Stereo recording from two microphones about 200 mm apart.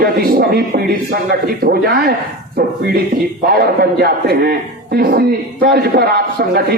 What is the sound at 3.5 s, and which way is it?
A man's voice, 50° right (ahead or behind).